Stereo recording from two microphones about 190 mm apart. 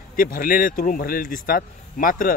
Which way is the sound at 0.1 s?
50° left (ahead or behind).